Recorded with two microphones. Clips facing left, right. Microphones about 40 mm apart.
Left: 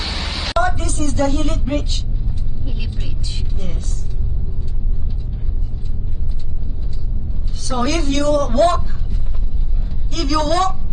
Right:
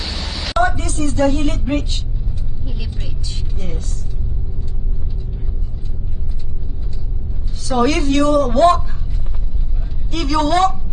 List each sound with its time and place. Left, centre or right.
0.0 s a sound: left
0.8 s a woman's voice: right
2.6 s vehicle: centre
7.6 s a woman's voice: right
10.1 s a woman's voice: right